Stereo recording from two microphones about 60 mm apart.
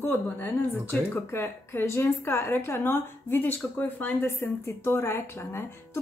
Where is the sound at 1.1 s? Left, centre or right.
Left.